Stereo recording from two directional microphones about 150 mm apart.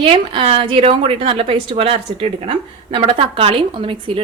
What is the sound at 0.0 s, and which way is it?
A woman's voice, 40° right (ahead or behind).